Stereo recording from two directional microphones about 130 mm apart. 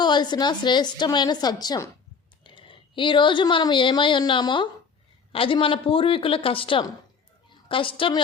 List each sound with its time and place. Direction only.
0.0 s a woman's voice: 35° left (ahead or behind)